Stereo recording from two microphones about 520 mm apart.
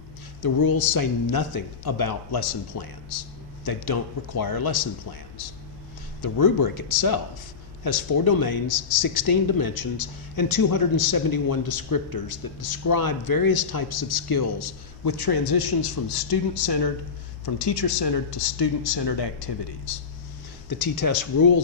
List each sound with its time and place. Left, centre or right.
0.4 s speech: left
6.2 s a man's voice: left
20.7 s speech: left